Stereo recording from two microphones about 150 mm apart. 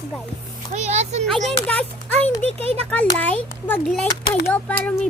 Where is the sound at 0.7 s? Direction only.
50° right (ahead or behind).